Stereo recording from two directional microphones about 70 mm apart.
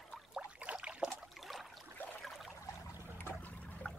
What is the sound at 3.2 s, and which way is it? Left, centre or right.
Trickle, left.